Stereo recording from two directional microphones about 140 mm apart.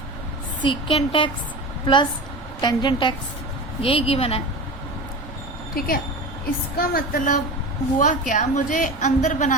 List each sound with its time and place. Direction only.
0.6 s a woman's voice: 40° left (ahead or behind)
2.6 s a woman's voice: 30° left (ahead or behind)
5.7 s a woman's voice: 90° left
7.9 s a woman's voice: 65° left (ahead or behind)